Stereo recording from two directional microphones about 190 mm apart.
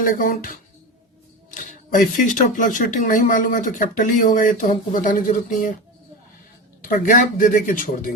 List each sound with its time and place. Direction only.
0.0 s speech: 45° left (ahead or behind)
1.5 s speech: 45° left (ahead or behind)
6.8 s speech: 45° left (ahead or behind)